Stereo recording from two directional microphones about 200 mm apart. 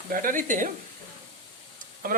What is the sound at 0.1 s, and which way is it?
Speech, 45° right (ahead or behind).